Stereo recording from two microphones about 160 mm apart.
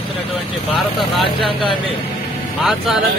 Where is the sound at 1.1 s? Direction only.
35° left (ahead or behind).